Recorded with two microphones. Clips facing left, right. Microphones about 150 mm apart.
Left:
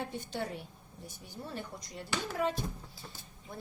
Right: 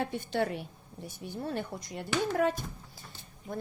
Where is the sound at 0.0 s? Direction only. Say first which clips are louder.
Right 7 dB; 65° right (ahead or behind).